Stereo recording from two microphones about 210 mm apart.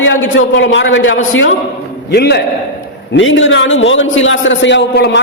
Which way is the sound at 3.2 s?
65° left (ahead or behind).